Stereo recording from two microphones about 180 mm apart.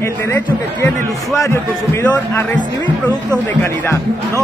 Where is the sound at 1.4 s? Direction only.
15° left (ahead or behind).